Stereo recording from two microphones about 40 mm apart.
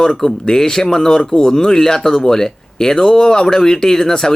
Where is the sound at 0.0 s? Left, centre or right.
Centre.